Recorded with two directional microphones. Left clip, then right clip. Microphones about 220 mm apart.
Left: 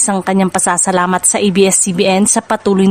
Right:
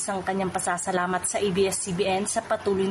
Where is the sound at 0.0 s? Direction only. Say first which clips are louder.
Left 12 dB; 50° left (ahead or behind).